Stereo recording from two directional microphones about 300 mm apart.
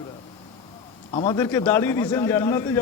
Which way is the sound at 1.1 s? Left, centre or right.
Centre.